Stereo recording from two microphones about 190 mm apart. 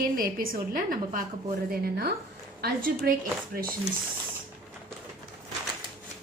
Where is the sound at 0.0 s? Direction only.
50° right (ahead or behind).